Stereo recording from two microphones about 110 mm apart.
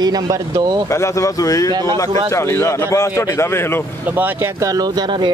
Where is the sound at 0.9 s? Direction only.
25° left (ahead or behind).